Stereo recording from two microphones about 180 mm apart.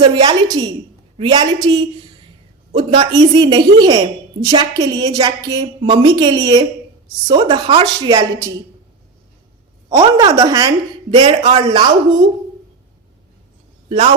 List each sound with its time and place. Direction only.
0.0 s a woman's voice: 25° right (ahead or behind)
10.2 s a woman's voice: 20° right (ahead or behind)